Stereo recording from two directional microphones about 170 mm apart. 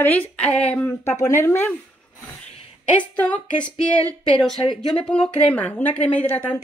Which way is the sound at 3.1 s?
10° left (ahead or behind).